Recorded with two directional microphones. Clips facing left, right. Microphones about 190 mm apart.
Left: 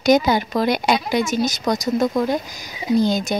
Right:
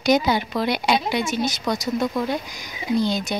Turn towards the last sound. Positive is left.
turn(degrees=45)  # may be behind; listen again after turning